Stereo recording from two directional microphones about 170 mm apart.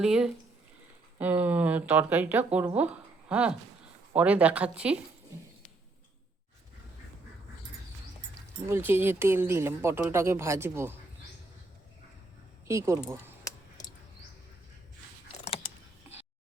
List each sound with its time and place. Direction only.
0.0 s a woman's voice: 5° right (ahead or behind)
8.6 s speech: 15° right (ahead or behind)
12.6 s speech: 15° right (ahead or behind)
15.3 s keys jangling: 35° left (ahead or behind)